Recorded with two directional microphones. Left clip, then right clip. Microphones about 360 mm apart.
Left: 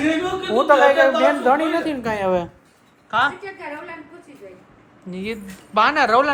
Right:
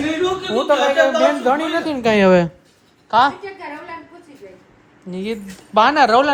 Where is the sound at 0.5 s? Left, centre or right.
Centre.